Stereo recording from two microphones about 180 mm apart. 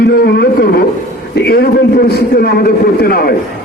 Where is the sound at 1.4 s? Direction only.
60° left (ahead or behind).